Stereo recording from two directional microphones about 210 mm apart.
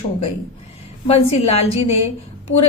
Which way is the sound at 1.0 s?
30° left (ahead or behind).